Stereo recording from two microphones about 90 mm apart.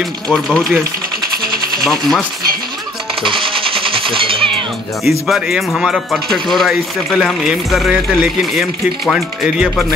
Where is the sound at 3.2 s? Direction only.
70° right (ahead or behind).